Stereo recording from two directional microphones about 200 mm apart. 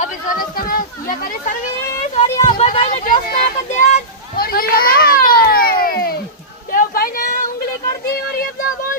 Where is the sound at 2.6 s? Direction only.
30° left (ahead or behind).